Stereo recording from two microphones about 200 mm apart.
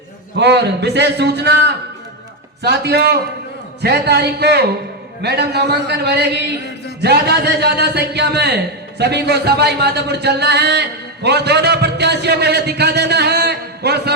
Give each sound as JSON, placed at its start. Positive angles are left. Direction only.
{"t": 0.3, "sound": "speech", "side_deg": -55}